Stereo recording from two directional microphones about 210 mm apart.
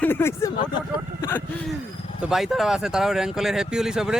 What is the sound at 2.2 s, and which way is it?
Speech, centre (ahead or behind).